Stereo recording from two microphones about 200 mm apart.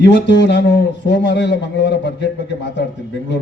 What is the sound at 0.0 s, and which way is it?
A man's voice, 60° left (ahead or behind).